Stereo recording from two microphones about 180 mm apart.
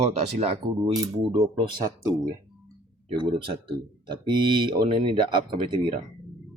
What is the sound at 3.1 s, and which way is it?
Speech, 25° right (ahead or behind).